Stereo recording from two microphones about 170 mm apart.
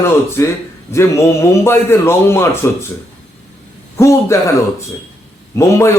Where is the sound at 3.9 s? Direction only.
15° left (ahead or behind).